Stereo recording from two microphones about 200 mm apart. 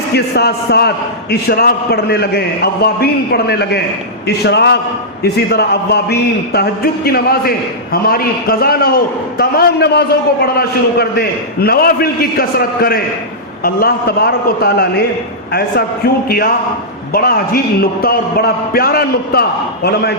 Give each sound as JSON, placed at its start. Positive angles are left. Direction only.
{"t": 0.1, "sound": "a man's voice", "side_deg": 55}
{"t": 17.1, "sound": "a man's voice", "side_deg": 50}